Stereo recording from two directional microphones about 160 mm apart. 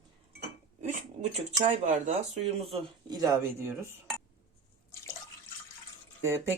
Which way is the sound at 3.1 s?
25° right (ahead or behind).